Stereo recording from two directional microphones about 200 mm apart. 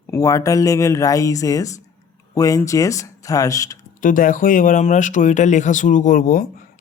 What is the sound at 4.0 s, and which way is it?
Speech, 40° left (ahead or behind).